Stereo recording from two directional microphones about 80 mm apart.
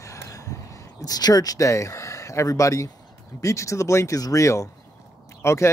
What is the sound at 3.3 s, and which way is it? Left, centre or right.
Speech, left.